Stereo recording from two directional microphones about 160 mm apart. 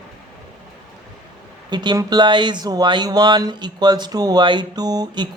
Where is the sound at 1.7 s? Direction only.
25° right (ahead or behind).